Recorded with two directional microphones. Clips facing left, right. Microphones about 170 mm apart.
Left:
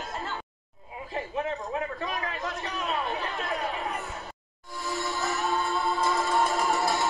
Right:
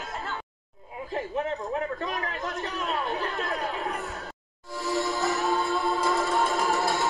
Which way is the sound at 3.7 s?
20° left (ahead or behind).